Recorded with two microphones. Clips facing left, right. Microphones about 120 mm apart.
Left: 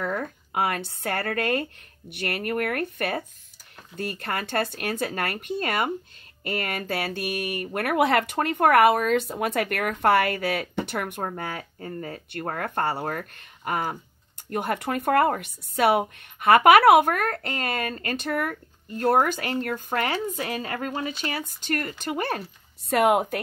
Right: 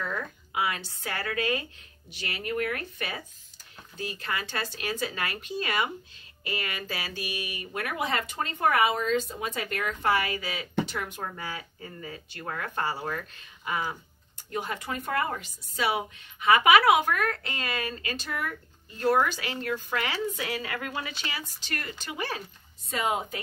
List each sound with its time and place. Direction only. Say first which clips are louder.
0.0 s speech: left 5 dB; 50° left (ahead or behind)
22.8 s speech: left 9 dB; 65° left (ahead or behind)